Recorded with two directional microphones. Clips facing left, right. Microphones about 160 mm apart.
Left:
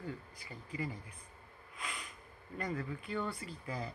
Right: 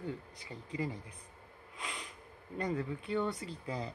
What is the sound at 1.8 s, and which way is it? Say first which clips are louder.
Snort: right 1 dB; 25° right (ahead or behind).